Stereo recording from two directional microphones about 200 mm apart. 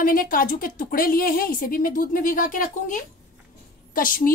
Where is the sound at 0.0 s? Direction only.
45° left (ahead or behind).